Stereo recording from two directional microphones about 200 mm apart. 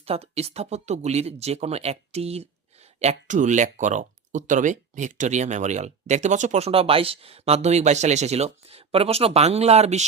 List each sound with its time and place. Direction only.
0.0 s speech: 30° right (ahead or behind)